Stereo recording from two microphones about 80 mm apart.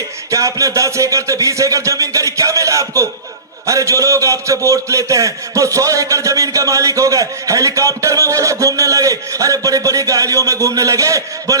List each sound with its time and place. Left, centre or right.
0.3 s a man's voice: right